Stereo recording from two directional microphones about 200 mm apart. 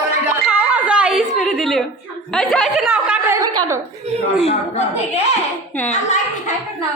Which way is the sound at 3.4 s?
20° right (ahead or behind).